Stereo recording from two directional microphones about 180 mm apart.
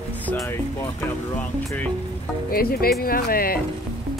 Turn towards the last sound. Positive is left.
turn(degrees=55)  # may be behind; listen again after turning